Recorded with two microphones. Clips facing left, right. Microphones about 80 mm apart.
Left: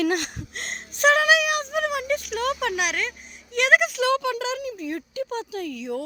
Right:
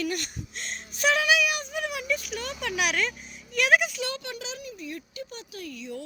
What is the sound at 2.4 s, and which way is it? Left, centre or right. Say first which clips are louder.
Speech: left 10 dB; left.